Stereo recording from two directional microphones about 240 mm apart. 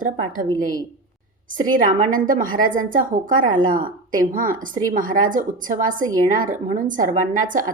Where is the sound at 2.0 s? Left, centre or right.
Right.